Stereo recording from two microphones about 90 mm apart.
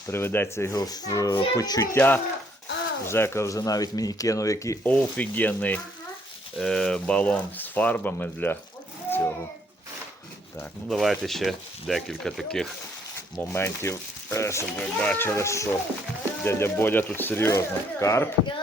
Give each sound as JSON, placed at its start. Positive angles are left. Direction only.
{"t": 0.1, "sound": "speech", "side_deg": 25}
{"t": 0.8, "sound": "speech", "side_deg": 45}
{"t": 1.9, "sound": "speech", "side_deg": 20}
{"t": 4.9, "sound": "speech", "side_deg": 15}
{"t": 6.6, "sound": "speech", "side_deg": 5}
{"t": 9.0, "sound": "a sound", "side_deg": 25}
{"t": 10.8, "sound": "speech", "side_deg": 0}
{"t": 13.4, "sound": "speech", "side_deg": 25}
{"t": 14.8, "sound": "speech", "side_deg": 15}